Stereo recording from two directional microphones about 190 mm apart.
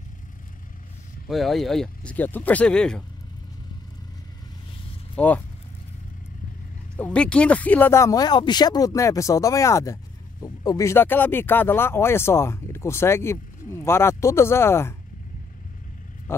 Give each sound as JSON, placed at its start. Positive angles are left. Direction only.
{"t": 1.3, "sound": "speech", "side_deg": 0}
{"t": 5.1, "sound": "speech", "side_deg": 10}
{"t": 7.0, "sound": "speech", "side_deg": 5}
{"t": 16.3, "sound": "roaring cats", "side_deg": 15}